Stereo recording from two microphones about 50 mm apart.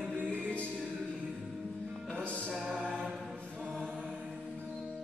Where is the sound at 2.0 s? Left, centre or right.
Left.